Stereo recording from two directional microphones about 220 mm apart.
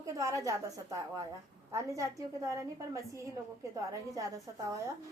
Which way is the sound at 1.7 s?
15° right (ahead or behind).